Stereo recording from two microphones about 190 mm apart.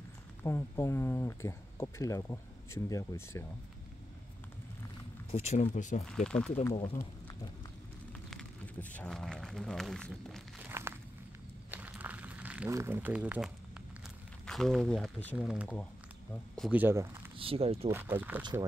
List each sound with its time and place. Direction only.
0.4 s speech: 10° left (ahead or behind)
5.3 s speech: 35° left (ahead or behind)
6.0 s speech: 5° left (ahead or behind)
8.1 s speech: 5° left (ahead or behind)
10.7 s walk: 15° right (ahead or behind)
11.7 s a sound: 10° right (ahead or behind)
15.3 s speech: 5° right (ahead or behind)
17.4 s speech: 30° right (ahead or behind)
17.9 s speech: 10° right (ahead or behind)
18.4 s speech: 20° right (ahead or behind)